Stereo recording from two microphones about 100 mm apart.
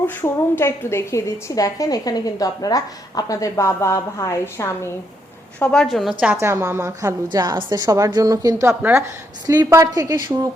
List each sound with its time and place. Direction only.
0.1 s a woman's voice: 20° left (ahead or behind)
5.5 s a woman's voice: 10° left (ahead or behind)
6.3 s a woman's voice: 30° right (ahead or behind)
8.6 s a woman's voice: 25° right (ahead or behind)
9.6 s a woman's voice: 35° right (ahead or behind)